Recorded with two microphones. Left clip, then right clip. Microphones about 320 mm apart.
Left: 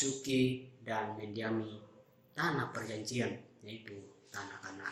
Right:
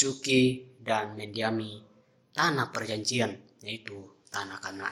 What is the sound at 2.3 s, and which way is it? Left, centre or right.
A man's voice, right.